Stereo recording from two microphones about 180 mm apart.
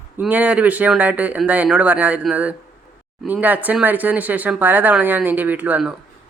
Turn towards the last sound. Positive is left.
turn(degrees=-10)  # may be behind; listen again after turning